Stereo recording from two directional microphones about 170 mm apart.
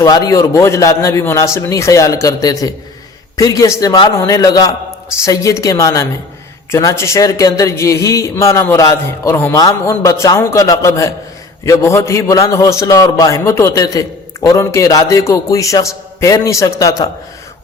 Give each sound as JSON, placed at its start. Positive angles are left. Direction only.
{"t": 0.0, "sound": "a man's voice", "side_deg": 20}